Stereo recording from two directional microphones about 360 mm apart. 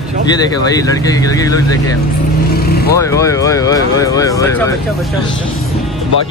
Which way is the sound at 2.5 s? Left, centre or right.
Left.